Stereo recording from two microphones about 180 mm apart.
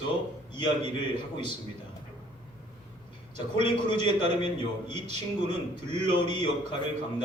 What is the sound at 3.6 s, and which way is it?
A man's voice, 25° left (ahead or behind).